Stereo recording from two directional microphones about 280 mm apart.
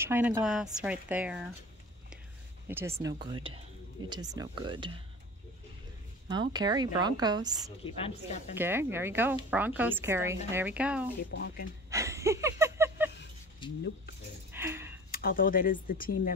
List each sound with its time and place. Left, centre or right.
0.0 s a woman's voice: centre
2.7 s speech: centre
6.2 s speech: centre
7.8 s speech: left
8.5 s speech: centre
11.3 s speech: left
11.9 s a sound: centre
13.6 s a sound: centre
14.5 s a sound: centre
15.0 s speech: left